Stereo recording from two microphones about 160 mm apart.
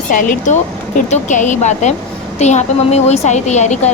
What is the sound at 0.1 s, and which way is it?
A woman's voice, 55° left (ahead or behind).